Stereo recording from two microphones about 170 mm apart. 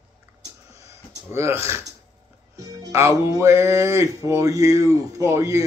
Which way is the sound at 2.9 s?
15° right (ahead or behind).